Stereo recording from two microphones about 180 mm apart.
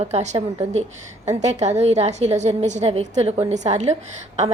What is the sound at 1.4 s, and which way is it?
A woman's voice, 40° right (ahead or behind).